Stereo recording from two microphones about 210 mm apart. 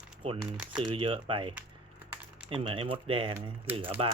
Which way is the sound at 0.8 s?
25° right (ahead or behind).